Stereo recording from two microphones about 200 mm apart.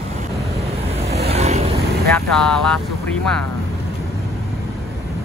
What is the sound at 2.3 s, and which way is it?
Speech, 5° left (ahead or behind).